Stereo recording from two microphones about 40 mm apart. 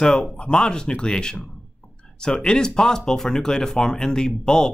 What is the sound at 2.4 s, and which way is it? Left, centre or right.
Speech, centre.